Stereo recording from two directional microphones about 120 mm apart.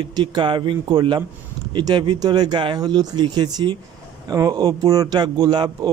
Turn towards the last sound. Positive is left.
turn(degrees=-35)  # may be behind; listen again after turning